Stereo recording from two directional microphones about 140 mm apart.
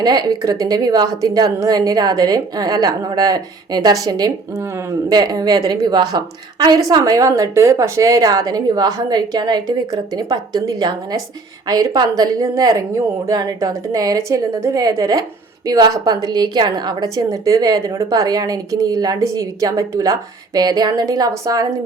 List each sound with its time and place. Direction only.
0.0 s a woman's voice: 30° right (ahead or behind)